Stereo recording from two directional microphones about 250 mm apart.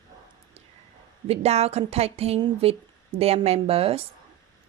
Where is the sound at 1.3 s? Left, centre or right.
Right.